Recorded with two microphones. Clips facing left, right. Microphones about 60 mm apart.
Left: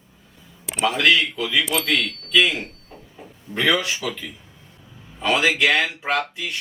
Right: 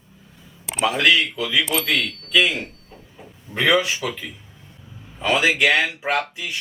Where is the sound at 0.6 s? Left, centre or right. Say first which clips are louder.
Even; centre.